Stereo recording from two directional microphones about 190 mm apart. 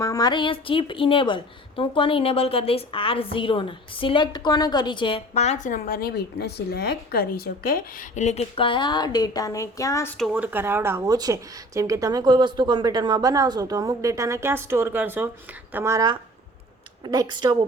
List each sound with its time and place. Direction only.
0.0 s a woman's voice: 20° left (ahead or behind); by 8.0 s 50° left (ahead or behind)
8.1 s a woman's voice: 35° left (ahead or behind); by 10.2 s 15° left (ahead or behind)
10.2 s a woman's voice: 5° right (ahead or behind)